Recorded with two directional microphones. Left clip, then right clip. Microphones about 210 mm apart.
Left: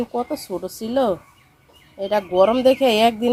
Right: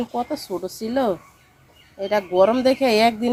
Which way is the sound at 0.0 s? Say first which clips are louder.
Left 1 dB; 10° left (ahead or behind).